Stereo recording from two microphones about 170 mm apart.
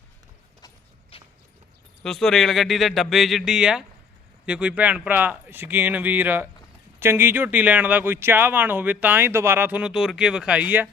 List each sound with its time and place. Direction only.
1.1 s walk: 30° left (ahead or behind)
2.0 s speech: 5° left (ahead or behind)